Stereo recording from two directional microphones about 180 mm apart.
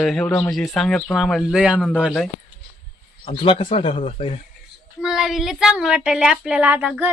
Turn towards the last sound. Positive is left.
turn(degrees=-10)  # may be behind; listen again after turning